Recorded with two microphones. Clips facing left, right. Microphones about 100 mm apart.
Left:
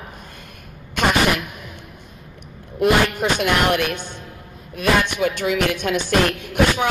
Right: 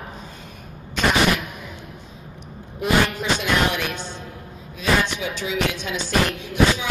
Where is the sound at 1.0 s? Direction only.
55° left (ahead or behind).